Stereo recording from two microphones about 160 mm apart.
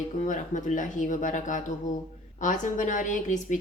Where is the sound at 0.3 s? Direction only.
50° left (ahead or behind).